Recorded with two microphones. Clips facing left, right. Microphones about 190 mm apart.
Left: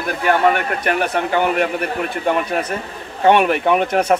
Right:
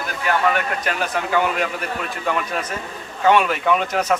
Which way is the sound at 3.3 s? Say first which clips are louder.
Left 2 dB; 60° left (ahead or behind).